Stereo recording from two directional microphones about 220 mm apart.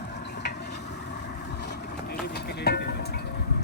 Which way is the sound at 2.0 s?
50° left (ahead or behind).